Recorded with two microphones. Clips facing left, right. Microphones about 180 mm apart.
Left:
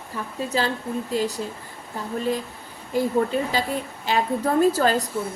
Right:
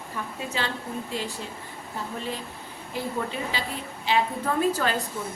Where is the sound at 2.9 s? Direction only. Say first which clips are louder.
Left 9 dB; 45° left (ahead or behind).